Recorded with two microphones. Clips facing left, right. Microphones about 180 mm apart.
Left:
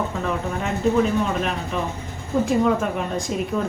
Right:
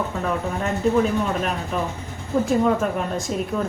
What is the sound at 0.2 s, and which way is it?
Speech, centre (ahead or behind).